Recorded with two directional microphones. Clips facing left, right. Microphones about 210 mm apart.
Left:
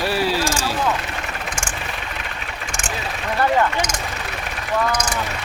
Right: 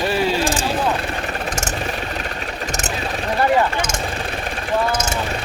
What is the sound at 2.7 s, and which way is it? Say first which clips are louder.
Vehicle: right 3 dB; 40° right (ahead or behind).